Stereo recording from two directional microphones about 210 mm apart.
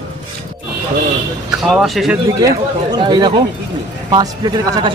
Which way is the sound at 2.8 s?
20° right (ahead or behind).